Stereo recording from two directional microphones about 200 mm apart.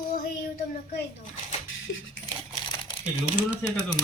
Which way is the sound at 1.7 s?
70° left (ahead or behind).